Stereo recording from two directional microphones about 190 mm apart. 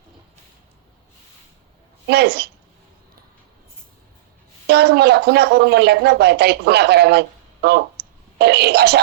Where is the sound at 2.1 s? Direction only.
60° right (ahead or behind).